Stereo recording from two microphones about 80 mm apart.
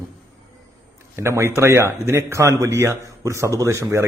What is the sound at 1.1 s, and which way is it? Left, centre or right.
A man's voice, right.